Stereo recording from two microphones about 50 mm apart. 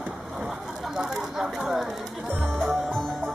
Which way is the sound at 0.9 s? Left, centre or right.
Centre.